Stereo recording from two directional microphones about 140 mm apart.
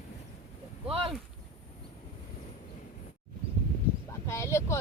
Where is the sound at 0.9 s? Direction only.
40° right (ahead or behind).